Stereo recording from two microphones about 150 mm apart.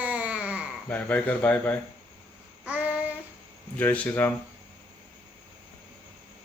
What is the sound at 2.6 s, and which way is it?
Child singing, 10° right (ahead or behind).